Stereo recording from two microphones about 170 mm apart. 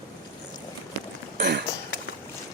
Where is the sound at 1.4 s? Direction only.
85° right.